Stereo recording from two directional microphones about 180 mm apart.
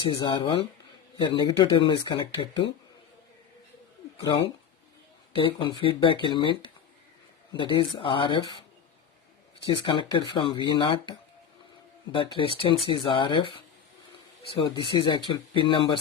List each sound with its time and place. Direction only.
0.2 s speech: 25° left (ahead or behind)
4.2 s speech: 25° left (ahead or behind)
9.7 s speech: 25° left (ahead or behind)
12.1 s speech: 30° left (ahead or behind)